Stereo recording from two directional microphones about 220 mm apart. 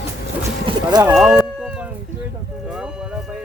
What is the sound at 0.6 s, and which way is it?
Music, 20° right (ahead or behind).